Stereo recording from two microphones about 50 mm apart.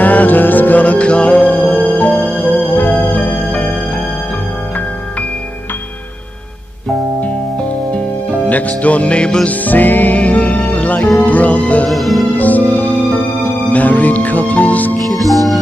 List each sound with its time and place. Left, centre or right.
0.0 s music: left
8.5 s music: left
9.5 s music: left
11.9 s music: centre
12.4 s music: left
15.1 s music: centre